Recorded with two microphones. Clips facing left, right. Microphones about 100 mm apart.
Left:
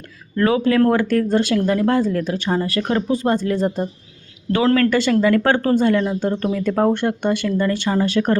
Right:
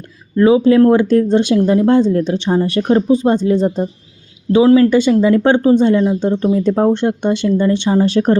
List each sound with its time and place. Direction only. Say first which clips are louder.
0.3 s speech: right 6 dB; 15° right (ahead or behind)